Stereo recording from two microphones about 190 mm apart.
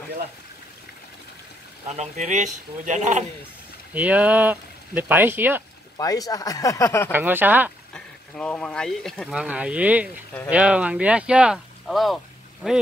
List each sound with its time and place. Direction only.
1.9 s speech: 35° right (ahead or behind)
3.9 s speech: 10° right (ahead or behind)
5.9 s speech: 20° left (ahead or behind)
7.1 s speech: 10° right (ahead or behind)
7.9 s speech: 5° left (ahead or behind)